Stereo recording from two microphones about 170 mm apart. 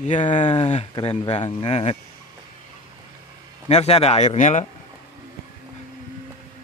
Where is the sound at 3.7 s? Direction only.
35° left (ahead or behind).